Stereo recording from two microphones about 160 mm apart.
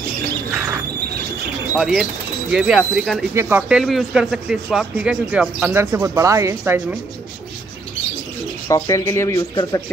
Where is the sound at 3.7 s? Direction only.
Centre (ahead or behind).